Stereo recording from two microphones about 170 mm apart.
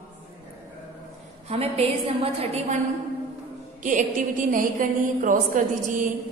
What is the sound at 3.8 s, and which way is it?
A woman's voice, 50° right (ahead or behind).